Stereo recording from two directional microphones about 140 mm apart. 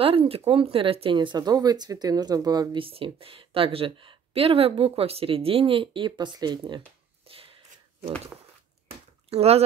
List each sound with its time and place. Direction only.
0.0 s speech: 40° right (ahead or behind)
7.2 s a sound: 40° right (ahead or behind)
9.3 s speech: 45° right (ahead or behind)